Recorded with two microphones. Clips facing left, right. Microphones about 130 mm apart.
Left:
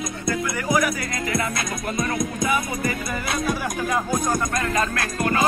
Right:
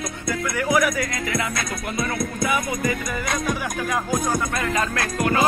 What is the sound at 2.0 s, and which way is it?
Music, 15° left (ahead or behind).